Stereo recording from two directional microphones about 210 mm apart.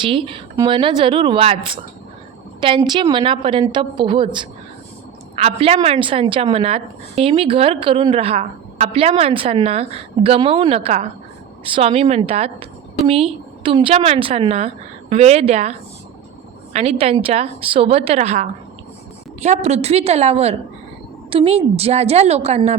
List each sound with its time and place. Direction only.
0.0 s a woman's voice: 25° right (ahead or behind)
16.7 s a woman's voice: 30° right (ahead or behind)